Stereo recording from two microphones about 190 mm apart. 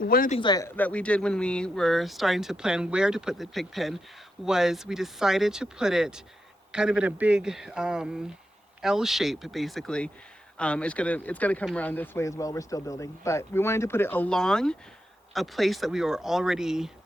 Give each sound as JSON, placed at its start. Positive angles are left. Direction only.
{"t": 0.0, "sound": "speech", "side_deg": 50}
{"t": 0.3, "sound": "speech", "side_deg": 20}
{"t": 0.8, "sound": "speech", "side_deg": 5}